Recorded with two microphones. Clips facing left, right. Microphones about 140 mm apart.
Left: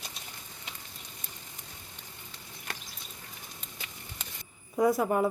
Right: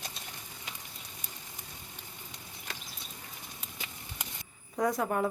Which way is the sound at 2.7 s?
60° left (ahead or behind).